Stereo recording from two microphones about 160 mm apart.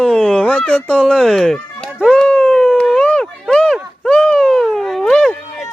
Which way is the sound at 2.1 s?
5° left (ahead or behind).